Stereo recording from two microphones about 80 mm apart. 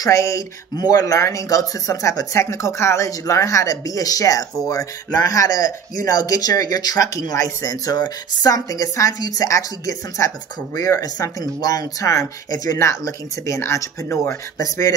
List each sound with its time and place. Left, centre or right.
0.0 s speech: left
0.7 s speech: left
14.6 s speech: left